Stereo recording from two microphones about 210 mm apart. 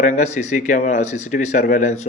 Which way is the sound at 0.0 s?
35° left (ahead or behind).